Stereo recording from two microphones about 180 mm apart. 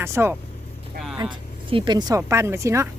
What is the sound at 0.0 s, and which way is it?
Speech, 15° right (ahead or behind).